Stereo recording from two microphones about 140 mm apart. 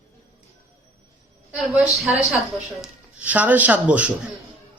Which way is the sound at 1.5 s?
10° right (ahead or behind).